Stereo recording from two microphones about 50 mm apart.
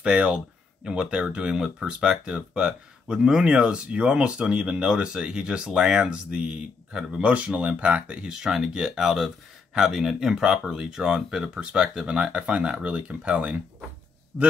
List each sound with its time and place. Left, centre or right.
0.0 s speech: centre
8.3 s speech: centre
14.3 s a man's voice: centre